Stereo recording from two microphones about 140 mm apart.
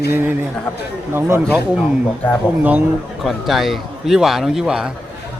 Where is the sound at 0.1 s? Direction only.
15° right (ahead or behind).